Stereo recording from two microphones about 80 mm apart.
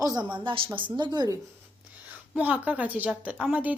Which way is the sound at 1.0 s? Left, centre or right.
Right.